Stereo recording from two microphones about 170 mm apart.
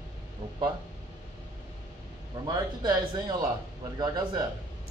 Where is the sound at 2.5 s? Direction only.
25° right (ahead or behind).